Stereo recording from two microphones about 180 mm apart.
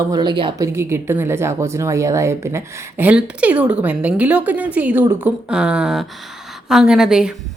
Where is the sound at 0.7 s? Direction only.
15° right (ahead or behind).